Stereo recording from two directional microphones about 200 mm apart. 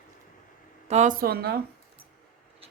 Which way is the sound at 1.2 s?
50° right (ahead or behind).